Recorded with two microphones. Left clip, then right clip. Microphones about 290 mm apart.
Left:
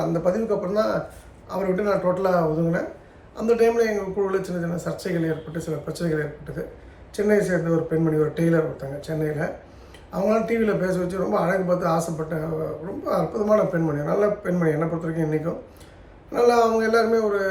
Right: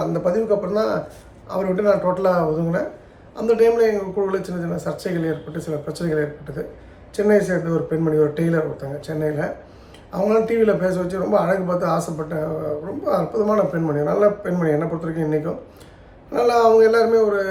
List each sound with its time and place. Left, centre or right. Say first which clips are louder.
0.0 s a man's voice: right 2 dB; centre